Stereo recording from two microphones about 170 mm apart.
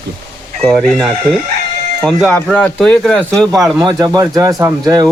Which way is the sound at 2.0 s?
Centre (ahead or behind).